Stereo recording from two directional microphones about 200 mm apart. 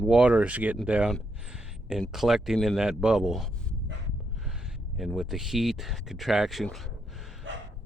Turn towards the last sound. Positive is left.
turn(degrees=0)  # may be behind; listen again after turning